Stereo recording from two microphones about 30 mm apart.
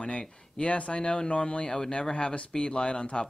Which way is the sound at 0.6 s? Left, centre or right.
Left.